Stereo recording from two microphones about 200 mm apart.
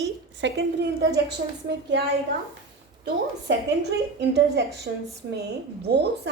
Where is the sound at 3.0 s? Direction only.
55° right (ahead or behind).